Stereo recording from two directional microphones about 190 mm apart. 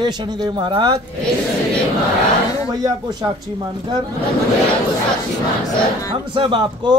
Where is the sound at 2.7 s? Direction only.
20° right (ahead or behind).